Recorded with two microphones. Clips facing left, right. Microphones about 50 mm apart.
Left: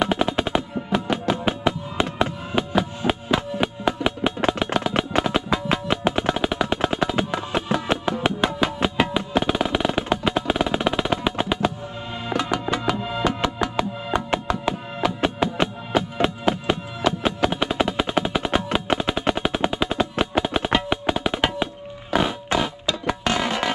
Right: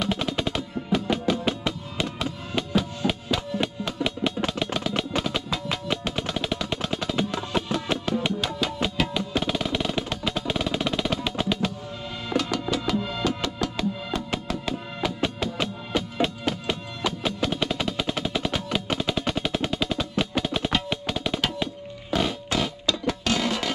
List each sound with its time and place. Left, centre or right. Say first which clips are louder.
0.0 s drum: left 5 dB; centre
1.1 s music: left 2 dB; centre
4.7 s percussion: left 5 dB; left
8.8 s music: left 4 dB; left
15.6 s music: left 5 dB; centre